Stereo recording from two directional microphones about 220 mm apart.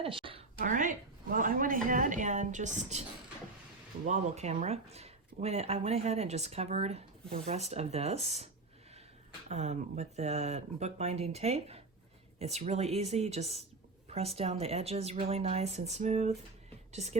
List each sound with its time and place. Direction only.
0.0 s speech: 25° right (ahead or behind)
0.6 s a woman's voice: 35° right (ahead or behind)
4.0 s speech: 30° right (ahead or behind)
9.5 s a woman's voice: 30° right (ahead or behind)